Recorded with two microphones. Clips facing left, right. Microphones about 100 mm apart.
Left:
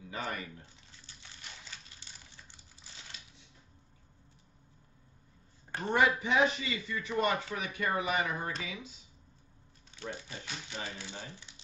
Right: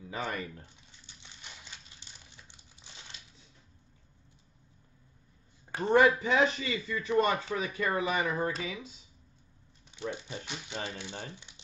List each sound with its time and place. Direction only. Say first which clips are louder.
0.1 s speech: right 3 dB; 35° right (ahead or behind)
2.3 s crumpling: even; 20° right (ahead or behind)
5.9 s speech: right 5 dB; 35° right (ahead or behind)
9.8 s speech: right 4 dB; 20° right (ahead or behind)